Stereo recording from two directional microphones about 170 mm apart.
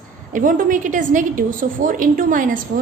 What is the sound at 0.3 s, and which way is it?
A woman's voice, 50° right (ahead or behind).